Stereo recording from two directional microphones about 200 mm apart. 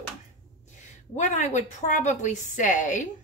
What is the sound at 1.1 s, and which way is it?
Speech, 35° left (ahead or behind).